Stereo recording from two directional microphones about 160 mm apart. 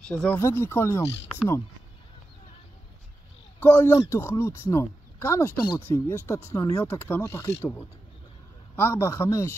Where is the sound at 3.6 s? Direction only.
10° left (ahead or behind).